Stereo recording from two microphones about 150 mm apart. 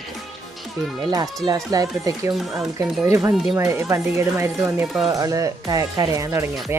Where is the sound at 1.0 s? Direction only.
25° right (ahead or behind).